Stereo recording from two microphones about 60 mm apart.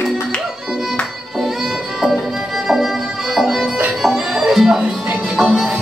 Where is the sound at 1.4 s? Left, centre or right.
Centre.